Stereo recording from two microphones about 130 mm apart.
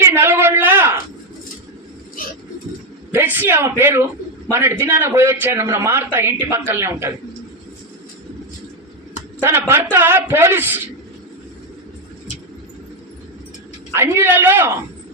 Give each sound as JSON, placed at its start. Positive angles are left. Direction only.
{"t": 0.0, "sound": "a sound", "side_deg": -20}
{"t": 3.1, "sound": "a man's voice", "side_deg": -15}
{"t": 9.4, "sound": "a man's voice", "side_deg": -20}
{"t": 13.9, "sound": "a man's voice", "side_deg": -20}